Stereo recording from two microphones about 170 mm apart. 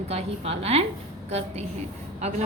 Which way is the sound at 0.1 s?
35° right (ahead or behind).